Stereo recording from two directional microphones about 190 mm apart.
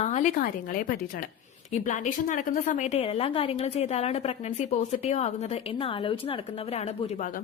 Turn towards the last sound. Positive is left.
turn(degrees=35)  # may be behind; listen again after turning